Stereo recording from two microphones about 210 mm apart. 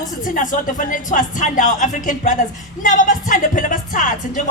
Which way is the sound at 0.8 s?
40° left (ahead or behind).